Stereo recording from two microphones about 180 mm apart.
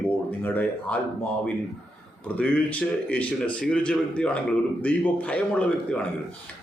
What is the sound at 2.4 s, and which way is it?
A man's voice, 10° left (ahead or behind).